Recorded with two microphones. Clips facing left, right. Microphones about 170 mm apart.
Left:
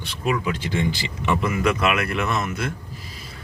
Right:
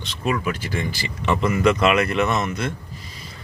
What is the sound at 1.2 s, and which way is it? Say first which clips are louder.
Speech: right 3 dB; 10° left (ahead or behind).